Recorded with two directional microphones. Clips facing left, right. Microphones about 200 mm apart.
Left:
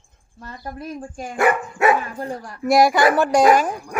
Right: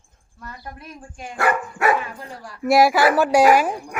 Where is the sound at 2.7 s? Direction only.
5° right (ahead or behind).